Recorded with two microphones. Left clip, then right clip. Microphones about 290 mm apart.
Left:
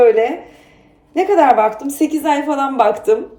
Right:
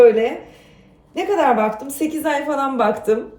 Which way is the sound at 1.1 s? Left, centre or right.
Centre.